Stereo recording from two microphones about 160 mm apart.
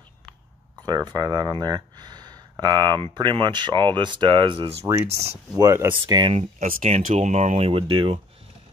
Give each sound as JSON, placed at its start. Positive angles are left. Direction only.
{"t": 0.8, "sound": "speech", "side_deg": -25}
{"t": 4.8, "sound": "speech", "side_deg": -20}
{"t": 6.1, "sound": "speech", "side_deg": -35}
{"t": 6.6, "sound": "speech", "side_deg": -50}